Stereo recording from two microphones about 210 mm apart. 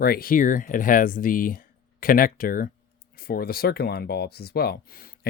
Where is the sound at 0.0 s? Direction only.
45° left (ahead or behind).